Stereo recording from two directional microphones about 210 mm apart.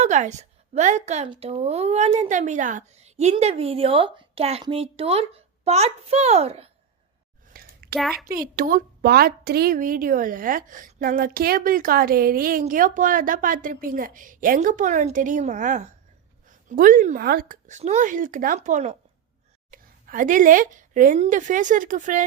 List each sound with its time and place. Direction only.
0.0 s a woman's voice: 35° right (ahead or behind)
7.5 s a sound: 45° right (ahead or behind)
7.9 s a child's voice: centre (ahead or behind)
8.2 s a woman's voice: 45° right (ahead or behind)